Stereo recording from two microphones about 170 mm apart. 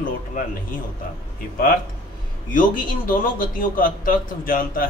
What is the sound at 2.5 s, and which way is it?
A man's voice, 50° left (ahead or behind).